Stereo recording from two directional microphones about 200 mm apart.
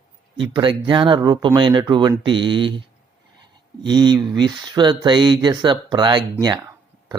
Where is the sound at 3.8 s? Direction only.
20° right (ahead or behind).